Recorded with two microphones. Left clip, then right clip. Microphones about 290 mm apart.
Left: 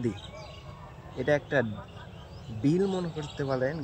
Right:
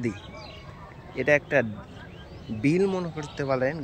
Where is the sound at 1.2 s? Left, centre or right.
Centre.